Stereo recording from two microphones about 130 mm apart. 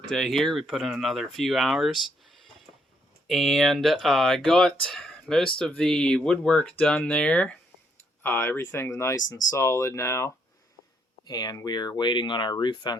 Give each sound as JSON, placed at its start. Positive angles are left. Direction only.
{"t": 0.1, "sound": "speech", "side_deg": 0}
{"t": 1.9, "sound": "speech", "side_deg": 35}
{"t": 3.2, "sound": "speech", "side_deg": 0}
{"t": 11.3, "sound": "speech", "side_deg": 30}